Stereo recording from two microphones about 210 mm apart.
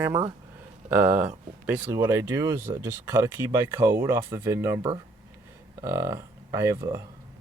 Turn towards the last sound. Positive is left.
turn(degrees=-15)  # may be behind; listen again after turning